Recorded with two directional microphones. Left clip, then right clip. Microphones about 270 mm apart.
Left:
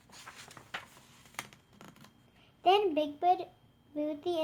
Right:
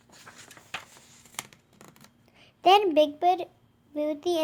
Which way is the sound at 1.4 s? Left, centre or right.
Right.